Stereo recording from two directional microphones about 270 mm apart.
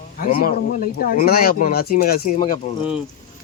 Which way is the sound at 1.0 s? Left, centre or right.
Left.